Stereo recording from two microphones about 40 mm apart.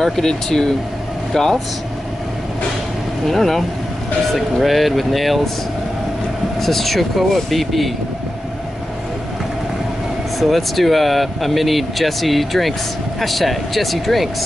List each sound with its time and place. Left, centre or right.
0.0 s speech: centre
3.3 s speech: centre
6.6 s speech: centre
10.4 s speech: centre